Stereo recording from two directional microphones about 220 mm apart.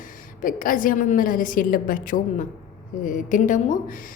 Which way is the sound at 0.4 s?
40° left (ahead or behind).